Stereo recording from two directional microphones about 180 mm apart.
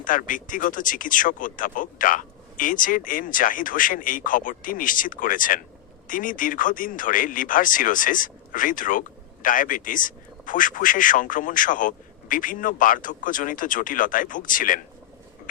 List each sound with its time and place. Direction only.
0.0 s speech: 50° left (ahead or behind)